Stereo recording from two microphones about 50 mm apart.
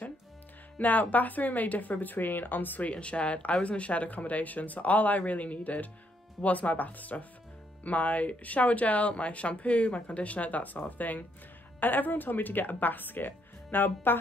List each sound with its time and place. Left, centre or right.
0.7 s speech: left
2.9 s speech: left